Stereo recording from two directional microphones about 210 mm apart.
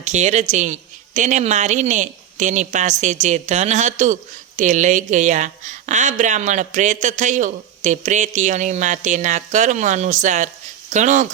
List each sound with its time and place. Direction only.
0.0 s speech: 35° right (ahead or behind)